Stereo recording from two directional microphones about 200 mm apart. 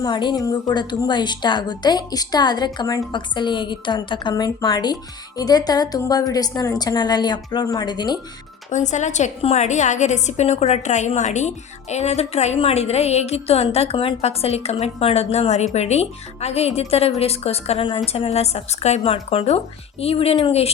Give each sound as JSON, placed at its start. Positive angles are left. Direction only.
{"t": 0.0, "sound": "a woman's voice", "side_deg": 25}
{"t": 8.7, "sound": "a woman's voice", "side_deg": 35}